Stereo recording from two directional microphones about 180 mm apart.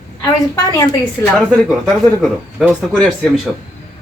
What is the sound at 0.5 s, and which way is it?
Speech, 15° left (ahead or behind).